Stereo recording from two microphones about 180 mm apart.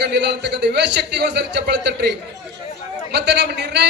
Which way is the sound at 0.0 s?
65° right (ahead or behind).